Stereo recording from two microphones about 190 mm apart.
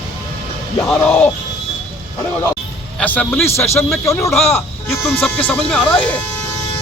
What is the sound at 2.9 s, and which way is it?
Speech, 5° left (ahead or behind).